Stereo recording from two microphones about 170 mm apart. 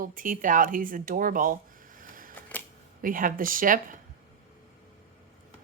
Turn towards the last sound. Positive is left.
turn(degrees=-55)  # may be behind; listen again after turning